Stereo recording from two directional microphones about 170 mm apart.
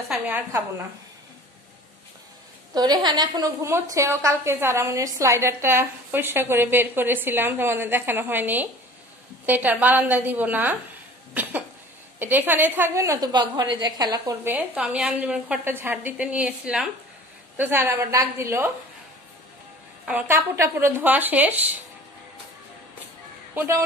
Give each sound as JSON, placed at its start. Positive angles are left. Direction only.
{"t": 0.5, "sound": "a woman's voice", "side_deg": -15}
{"t": 2.7, "sound": "a woman's voice", "side_deg": -25}
{"t": 14.5, "sound": "a woman's voice", "side_deg": -5}
{"t": 20.1, "sound": "a woman's voice", "side_deg": -10}
{"t": 23.5, "sound": "speech", "side_deg": -10}